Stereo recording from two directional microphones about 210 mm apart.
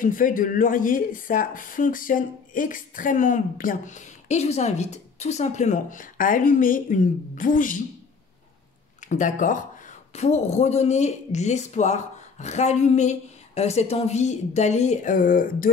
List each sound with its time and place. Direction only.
0.0 s speech: 40° left (ahead or behind)
9.0 s speech: 35° left (ahead or behind)